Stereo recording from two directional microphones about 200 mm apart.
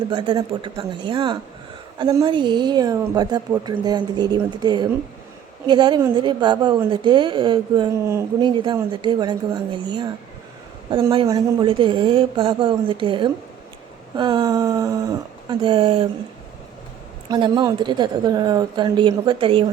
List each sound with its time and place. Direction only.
0.1 s speech: 25° right (ahead or behind)
17.2 s speech: 20° right (ahead or behind)